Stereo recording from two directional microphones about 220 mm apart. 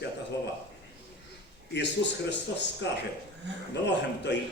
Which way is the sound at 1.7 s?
50° left (ahead or behind).